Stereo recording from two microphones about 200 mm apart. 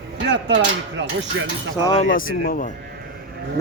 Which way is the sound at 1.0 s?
75° right (ahead or behind).